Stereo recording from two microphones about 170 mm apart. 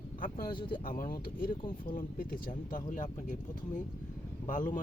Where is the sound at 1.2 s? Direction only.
55° left (ahead or behind).